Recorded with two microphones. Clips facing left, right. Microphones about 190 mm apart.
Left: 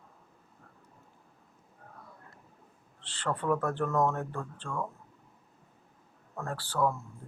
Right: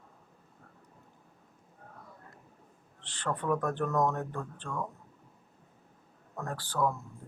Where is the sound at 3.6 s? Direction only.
15° right (ahead or behind).